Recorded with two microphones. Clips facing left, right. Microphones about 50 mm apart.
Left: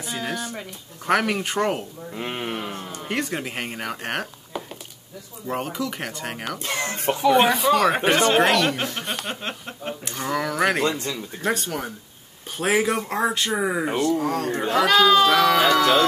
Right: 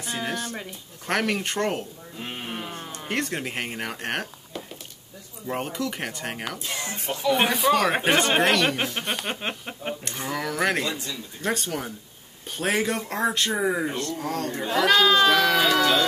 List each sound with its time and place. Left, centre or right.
0.0 s speech: centre
2.1 s speech: left
2.7 s speech: centre
5.5 s speech: centre
6.6 s music: left
7.3 s speech: centre
8.7 s speech: centre
9.0 s speech: centre
9.4 s a sound: centre
10.0 s speech: centre